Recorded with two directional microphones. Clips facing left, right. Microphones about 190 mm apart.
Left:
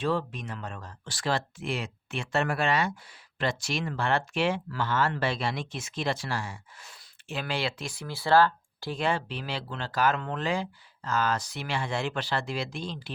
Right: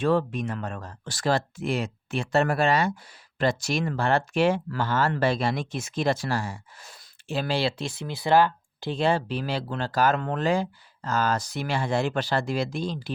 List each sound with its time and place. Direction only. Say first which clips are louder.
0.0 s speech: right 6 dB; 50° right (ahead or behind)